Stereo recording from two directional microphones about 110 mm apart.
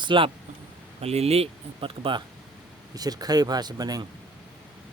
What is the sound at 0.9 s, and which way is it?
Speech, 70° right (ahead or behind).